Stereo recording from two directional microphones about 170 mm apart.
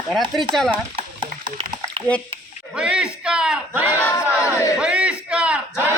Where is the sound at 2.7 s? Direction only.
5° right (ahead or behind).